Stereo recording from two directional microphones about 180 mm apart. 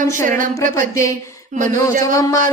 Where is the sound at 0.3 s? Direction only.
50° right (ahead or behind).